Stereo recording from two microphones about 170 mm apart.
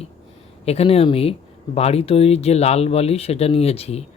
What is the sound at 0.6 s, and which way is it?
Speech, 35° left (ahead or behind).